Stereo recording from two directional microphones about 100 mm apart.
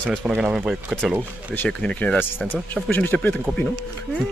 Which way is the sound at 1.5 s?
15° left (ahead or behind).